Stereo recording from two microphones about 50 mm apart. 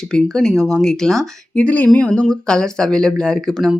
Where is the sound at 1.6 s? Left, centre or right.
Left.